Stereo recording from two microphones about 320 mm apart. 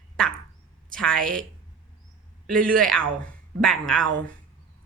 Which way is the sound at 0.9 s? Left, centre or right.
Centre.